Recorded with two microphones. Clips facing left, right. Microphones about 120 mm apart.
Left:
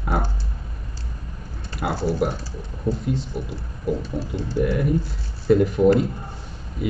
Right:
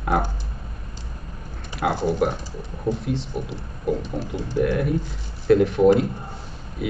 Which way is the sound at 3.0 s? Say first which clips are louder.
Left 1 dB; centre (ahead or behind).